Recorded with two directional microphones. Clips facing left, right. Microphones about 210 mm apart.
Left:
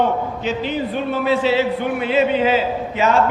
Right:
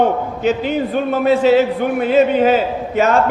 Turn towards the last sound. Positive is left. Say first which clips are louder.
# right 3 dB
turn(degrees=-45)  # may be behind; listen again after turning